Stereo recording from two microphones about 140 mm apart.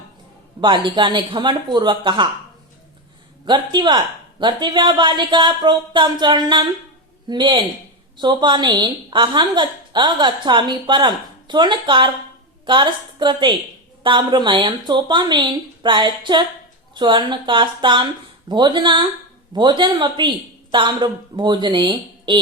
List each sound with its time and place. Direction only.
0.6 s a woman's voice: 35° right (ahead or behind)
3.4 s a woman's voice: 35° right (ahead or behind)